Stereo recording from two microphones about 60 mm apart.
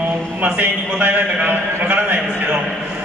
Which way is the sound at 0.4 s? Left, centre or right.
Right.